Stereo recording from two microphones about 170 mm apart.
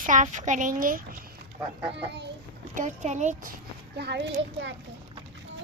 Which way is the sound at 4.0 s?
85° right.